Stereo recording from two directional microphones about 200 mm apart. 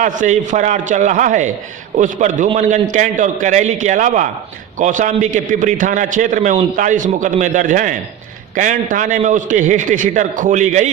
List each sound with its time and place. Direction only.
0.0 s a man's voice: 40° right (ahead or behind)